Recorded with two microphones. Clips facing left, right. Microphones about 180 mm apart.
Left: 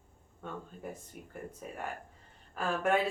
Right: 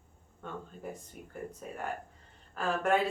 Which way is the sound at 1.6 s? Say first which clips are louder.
Right 2 dB; 5° left (ahead or behind).